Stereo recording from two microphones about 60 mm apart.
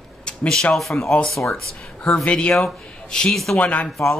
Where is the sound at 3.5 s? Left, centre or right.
Left.